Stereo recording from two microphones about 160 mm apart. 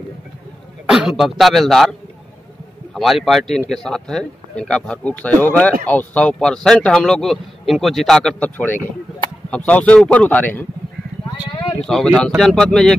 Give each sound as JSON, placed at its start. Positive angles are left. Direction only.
{"t": 0.8, "sound": "a man's voice", "side_deg": -5}
{"t": 11.2, "sound": "a sound", "side_deg": 25}
{"t": 11.8, "sound": "a man's voice", "side_deg": 5}